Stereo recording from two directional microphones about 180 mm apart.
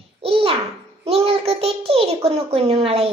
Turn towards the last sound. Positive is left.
turn(degrees=-35)  # may be behind; listen again after turning